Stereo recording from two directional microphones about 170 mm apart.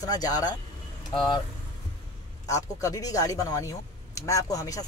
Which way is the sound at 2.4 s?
20° left (ahead or behind).